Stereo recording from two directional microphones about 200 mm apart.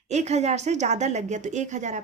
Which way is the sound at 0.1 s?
35° right (ahead or behind).